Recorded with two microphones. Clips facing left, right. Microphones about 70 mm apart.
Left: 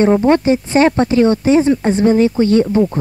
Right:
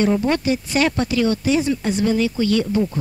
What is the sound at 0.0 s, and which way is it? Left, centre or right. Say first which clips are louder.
Speech: left 7 dB; left.